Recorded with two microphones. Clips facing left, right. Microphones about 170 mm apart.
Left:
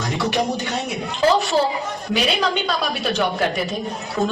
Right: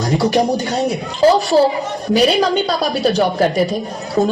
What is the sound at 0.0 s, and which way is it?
A woman's voice, 35° right (ahead or behind).